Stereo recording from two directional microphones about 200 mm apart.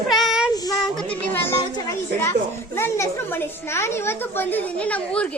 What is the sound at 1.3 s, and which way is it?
Children playing, 10° left (ahead or behind).